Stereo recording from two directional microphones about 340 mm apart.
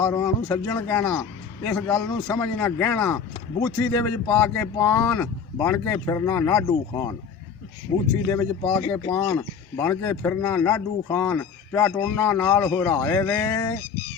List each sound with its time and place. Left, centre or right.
0.0 s speech: centre
8.3 s speech: centre